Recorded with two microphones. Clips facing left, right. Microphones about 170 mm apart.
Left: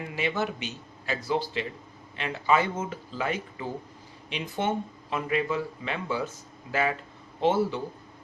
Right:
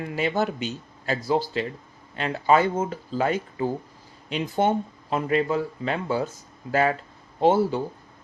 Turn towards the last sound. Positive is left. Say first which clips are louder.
# right 4 dB
turn(degrees=-40)  # may be behind; listen again after turning